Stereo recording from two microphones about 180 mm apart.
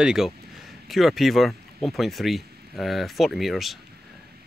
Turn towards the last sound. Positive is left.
turn(degrees=0)  # may be behind; listen again after turning